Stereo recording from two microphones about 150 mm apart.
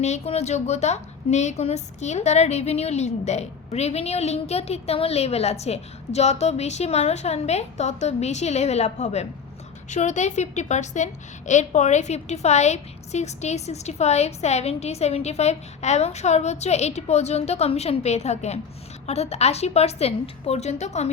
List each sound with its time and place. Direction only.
0.0 s a woman's voice: 45° left (ahead or behind)